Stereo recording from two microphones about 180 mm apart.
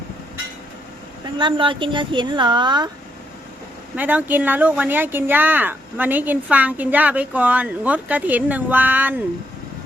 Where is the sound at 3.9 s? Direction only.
10° right (ahead or behind).